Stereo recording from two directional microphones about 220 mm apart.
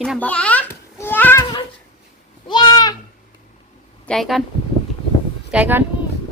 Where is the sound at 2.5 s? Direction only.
20° left (ahead or behind).